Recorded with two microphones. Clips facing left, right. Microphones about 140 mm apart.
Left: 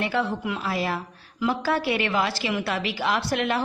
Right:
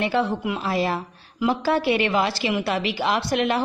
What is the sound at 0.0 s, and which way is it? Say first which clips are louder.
A woman's voice: right 3 dB; 20° right (ahead or behind).